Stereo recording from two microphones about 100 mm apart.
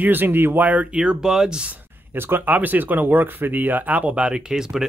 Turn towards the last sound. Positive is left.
turn(degrees=-5)  # may be behind; listen again after turning